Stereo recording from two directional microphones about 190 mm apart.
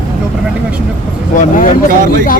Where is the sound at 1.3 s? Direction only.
45° left (ahead or behind).